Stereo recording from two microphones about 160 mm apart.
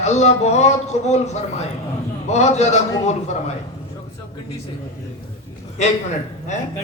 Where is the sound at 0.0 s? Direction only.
45° left (ahead or behind).